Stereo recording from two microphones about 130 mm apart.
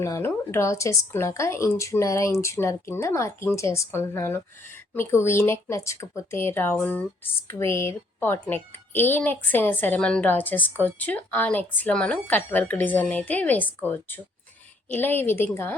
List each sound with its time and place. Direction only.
0.0 s a woman's voice: 20° left (ahead or behind)